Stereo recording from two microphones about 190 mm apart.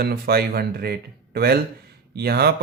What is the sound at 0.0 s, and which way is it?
Speech, 55° right (ahead or behind).